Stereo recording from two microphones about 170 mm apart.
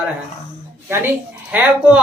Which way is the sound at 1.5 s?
10° right (ahead or behind).